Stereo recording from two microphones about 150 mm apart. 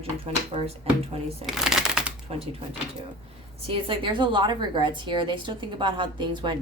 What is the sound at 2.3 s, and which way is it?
Speech, 40° right (ahead or behind).